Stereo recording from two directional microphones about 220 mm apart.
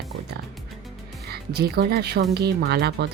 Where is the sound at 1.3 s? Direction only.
45° right (ahead or behind).